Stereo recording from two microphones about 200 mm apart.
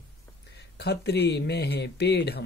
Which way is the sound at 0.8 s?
55° left (ahead or behind).